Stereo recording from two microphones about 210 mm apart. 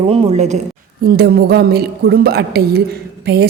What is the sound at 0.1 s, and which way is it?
Speech, 30° right (ahead or behind).